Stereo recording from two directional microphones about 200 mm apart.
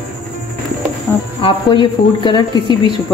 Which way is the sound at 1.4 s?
25° left (ahead or behind).